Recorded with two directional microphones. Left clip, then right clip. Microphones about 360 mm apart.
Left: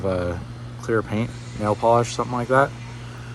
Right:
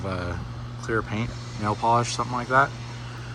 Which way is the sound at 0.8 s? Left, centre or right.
Centre.